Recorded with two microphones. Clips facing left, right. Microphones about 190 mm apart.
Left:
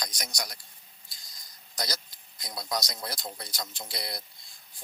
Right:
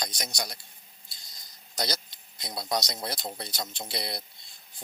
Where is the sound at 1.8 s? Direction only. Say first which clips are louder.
Right 4 dB; 25° right (ahead or behind).